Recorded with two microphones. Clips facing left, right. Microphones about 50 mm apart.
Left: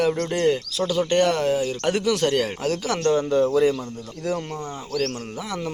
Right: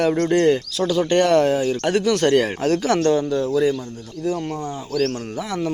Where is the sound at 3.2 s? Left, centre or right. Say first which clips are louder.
Left 1 dB; left.